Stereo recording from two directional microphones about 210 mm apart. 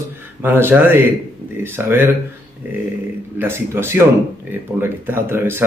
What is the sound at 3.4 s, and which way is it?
Speech, 10° right (ahead or behind).